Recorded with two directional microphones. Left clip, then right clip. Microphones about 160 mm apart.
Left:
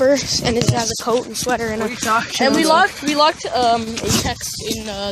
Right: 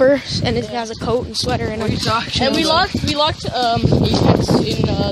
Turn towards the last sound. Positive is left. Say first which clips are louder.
# right 4 dB
turn(degrees=5)  # may be behind; listen again after turning